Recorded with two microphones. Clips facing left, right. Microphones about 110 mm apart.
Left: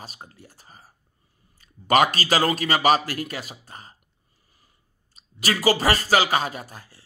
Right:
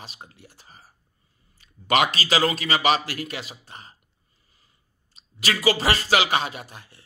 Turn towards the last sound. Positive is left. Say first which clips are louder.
# left 2 dB
turn(degrees=35)  # may be behind; listen again after turning